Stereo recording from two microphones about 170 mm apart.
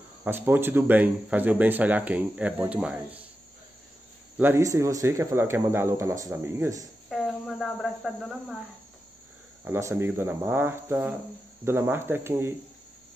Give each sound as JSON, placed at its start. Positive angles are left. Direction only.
{"t": 0.2, "sound": "speech", "side_deg": -15}
{"t": 4.4, "sound": "speech", "side_deg": -15}
{"t": 7.1, "sound": "speech", "side_deg": 0}
{"t": 9.7, "sound": "speech", "side_deg": -15}